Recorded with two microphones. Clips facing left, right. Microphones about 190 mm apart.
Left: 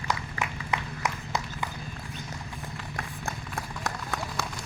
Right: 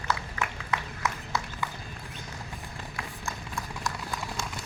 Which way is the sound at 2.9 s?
60° left (ahead or behind).